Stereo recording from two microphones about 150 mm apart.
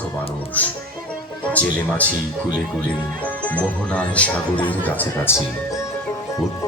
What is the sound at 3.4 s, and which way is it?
Speech, 10° left (ahead or behind).